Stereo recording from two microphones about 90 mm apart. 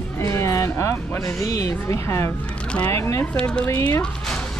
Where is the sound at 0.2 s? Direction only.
30° left (ahead or behind).